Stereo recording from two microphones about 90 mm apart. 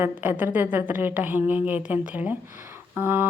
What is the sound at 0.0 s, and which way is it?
A woman's voice, 20° right (ahead or behind).